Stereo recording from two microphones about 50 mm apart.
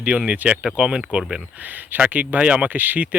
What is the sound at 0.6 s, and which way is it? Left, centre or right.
Speech, centre.